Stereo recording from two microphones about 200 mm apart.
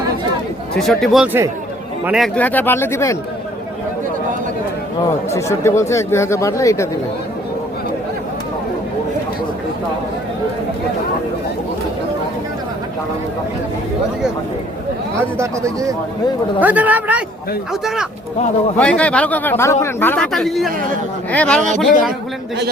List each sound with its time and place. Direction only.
0.8 s a man's voice: centre (ahead or behind)
5.3 s speech: 15° left (ahead or behind)
15.4 s a man's voice: 15° right (ahead or behind); by 22.1 s 5° left (ahead or behind)